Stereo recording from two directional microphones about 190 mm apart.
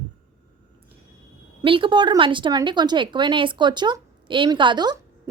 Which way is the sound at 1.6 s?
25° right (ahead or behind).